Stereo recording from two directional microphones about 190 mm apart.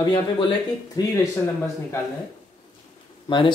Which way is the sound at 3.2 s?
25° left (ahead or behind).